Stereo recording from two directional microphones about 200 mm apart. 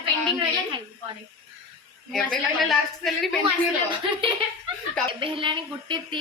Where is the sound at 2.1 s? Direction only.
Centre (ahead or behind).